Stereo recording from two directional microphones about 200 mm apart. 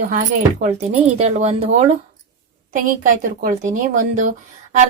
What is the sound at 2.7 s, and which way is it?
Speech, 40° right (ahead or behind).